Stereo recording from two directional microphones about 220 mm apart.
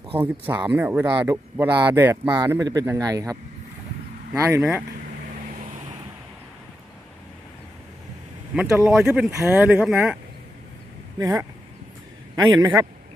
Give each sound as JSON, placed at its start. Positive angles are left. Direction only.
{"t": 0.2, "sound": "speech", "side_deg": -10}
{"t": 4.4, "sound": "speech", "side_deg": -15}
{"t": 5.5, "sound": "vehicle", "side_deg": -30}
{"t": 8.5, "sound": "speech", "side_deg": -10}
{"t": 11.2, "sound": "speech", "side_deg": -15}
{"t": 12.5, "sound": "speech", "side_deg": -15}